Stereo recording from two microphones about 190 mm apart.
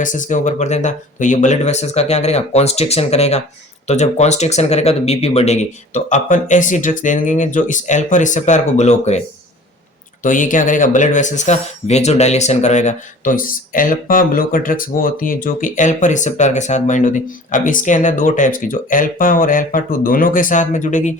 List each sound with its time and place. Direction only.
0.0 s speech: 40° left (ahead or behind)
10.2 s speech: 45° left (ahead or behind)